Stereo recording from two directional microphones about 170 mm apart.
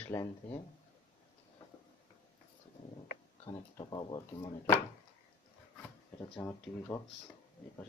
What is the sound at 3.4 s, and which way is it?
Speech, 25° left (ahead or behind).